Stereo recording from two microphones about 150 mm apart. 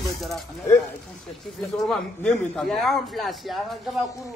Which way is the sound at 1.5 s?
Centre (ahead or behind).